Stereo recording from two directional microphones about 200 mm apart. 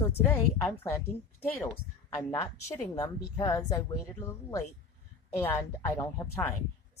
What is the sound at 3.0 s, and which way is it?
Speech, 15° left (ahead or behind).